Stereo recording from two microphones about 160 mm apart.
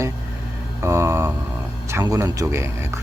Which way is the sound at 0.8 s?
15° right (ahead or behind).